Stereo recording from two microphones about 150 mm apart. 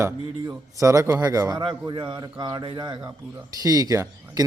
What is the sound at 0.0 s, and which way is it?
A man's voice, 20° right (ahead or behind).